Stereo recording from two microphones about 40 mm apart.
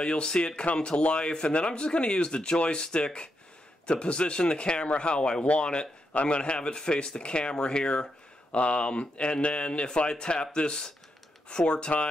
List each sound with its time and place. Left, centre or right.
0.0 s speech: left
8.5 s speech: left